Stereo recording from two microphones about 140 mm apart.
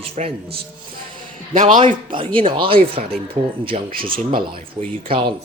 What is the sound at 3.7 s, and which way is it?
Speech, 55° right (ahead or behind).